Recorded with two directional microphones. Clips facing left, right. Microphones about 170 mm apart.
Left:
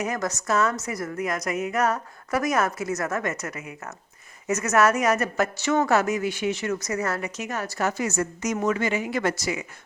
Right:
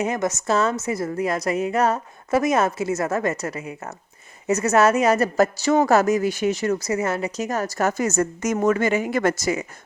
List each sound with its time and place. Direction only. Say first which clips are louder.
0.0 s a woman's voice: right 4 dB; 25° right (ahead or behind)
7.3 s a woman's voice: right 6 dB; 40° right (ahead or behind)